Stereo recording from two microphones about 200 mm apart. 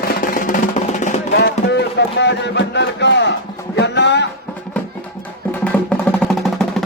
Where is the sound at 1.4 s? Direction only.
60° left (ahead or behind).